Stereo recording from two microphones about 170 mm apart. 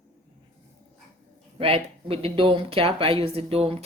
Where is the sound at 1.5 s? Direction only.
35° right (ahead or behind).